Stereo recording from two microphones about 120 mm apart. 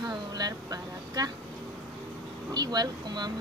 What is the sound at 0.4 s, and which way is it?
Speech, 30° right (ahead or behind).